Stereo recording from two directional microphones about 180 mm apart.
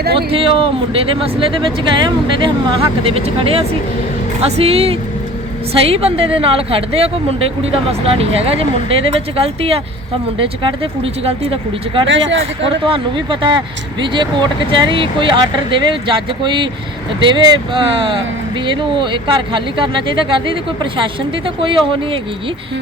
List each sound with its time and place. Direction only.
0.0 s speech: 60° right (ahead or behind)
0.3 s speech: 30° right (ahead or behind)
1.8 s speech: 25° right (ahead or behind)
12.0 s speech: 90° right
12.6 s speech: 30° right (ahead or behind)